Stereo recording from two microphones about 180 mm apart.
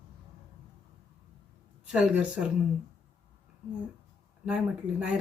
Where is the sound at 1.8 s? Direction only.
5° right (ahead or behind).